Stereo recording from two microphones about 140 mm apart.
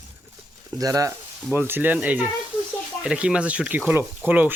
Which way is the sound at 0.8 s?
25° right (ahead or behind).